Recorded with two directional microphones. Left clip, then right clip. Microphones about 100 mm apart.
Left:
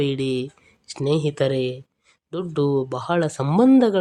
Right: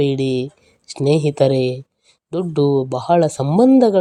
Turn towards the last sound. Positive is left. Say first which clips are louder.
# right 4 dB
turn(degrees=-15)  # may be behind; listen again after turning